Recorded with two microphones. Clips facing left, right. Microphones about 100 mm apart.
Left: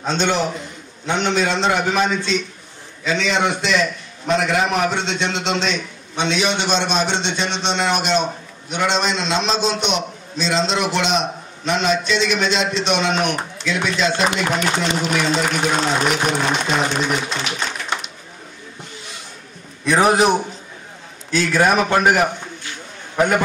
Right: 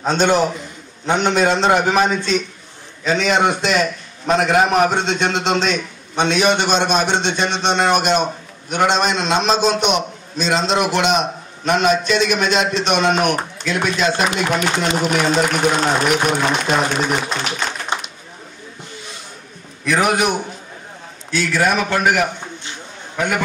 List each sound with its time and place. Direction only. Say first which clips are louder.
0.0 s a man's voice: right 4 dB; 45° right (ahead or behind)
19.8 s a man's voice: left 2 dB; 30° left (ahead or behind)